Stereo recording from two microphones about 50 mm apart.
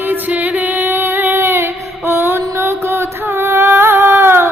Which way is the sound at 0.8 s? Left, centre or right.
Right.